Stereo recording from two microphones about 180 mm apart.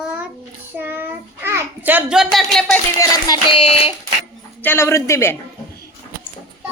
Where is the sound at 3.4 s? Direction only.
30° left (ahead or behind).